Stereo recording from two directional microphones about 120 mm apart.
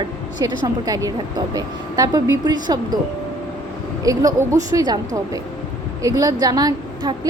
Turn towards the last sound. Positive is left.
turn(degrees=-35)  # may be behind; listen again after turning